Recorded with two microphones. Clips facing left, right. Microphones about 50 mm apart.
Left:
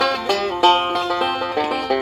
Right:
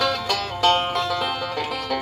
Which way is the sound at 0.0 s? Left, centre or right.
Centre.